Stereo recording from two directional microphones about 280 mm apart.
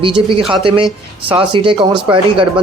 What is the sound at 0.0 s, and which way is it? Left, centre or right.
A man's voice, centre.